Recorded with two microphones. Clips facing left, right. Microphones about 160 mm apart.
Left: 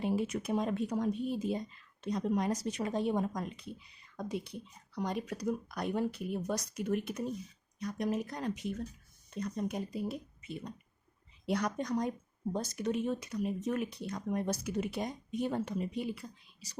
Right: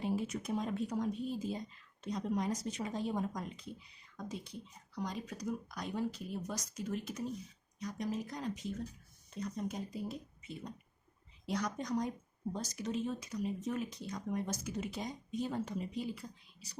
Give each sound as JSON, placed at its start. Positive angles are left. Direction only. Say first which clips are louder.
{"t": 0.3, "sound": "speech", "louder": "left 4 dB", "side_deg": 70}